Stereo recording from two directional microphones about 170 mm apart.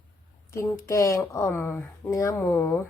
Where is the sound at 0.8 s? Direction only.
15° left (ahead or behind).